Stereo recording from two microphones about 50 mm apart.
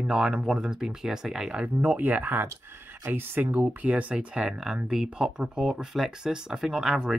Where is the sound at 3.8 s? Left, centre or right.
Right.